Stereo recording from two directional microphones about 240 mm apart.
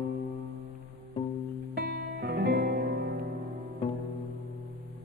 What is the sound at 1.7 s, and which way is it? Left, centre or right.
Music, right.